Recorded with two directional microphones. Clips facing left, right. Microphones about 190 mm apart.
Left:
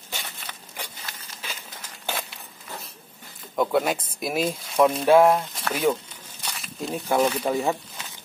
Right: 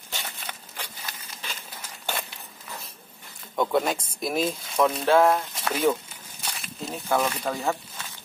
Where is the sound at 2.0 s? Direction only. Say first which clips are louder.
Left 1 dB; centre (ahead or behind).